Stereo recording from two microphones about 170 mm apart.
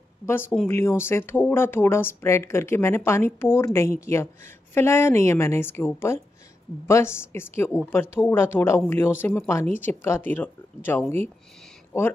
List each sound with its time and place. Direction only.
0.3 s speech: 15° left (ahead or behind)